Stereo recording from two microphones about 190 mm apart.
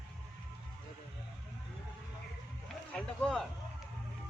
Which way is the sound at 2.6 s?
5° left (ahead or behind).